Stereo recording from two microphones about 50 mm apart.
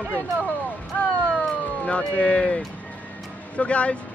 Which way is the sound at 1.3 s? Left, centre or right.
Left.